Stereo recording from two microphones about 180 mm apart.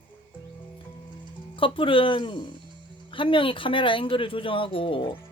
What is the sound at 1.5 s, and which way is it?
Speech, 30° left (ahead or behind).